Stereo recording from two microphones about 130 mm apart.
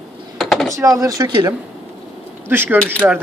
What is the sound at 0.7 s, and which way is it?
Speech, 25° right (ahead or behind).